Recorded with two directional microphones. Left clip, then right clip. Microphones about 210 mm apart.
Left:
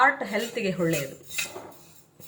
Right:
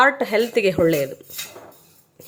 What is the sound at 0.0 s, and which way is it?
Speech, 50° right (ahead or behind).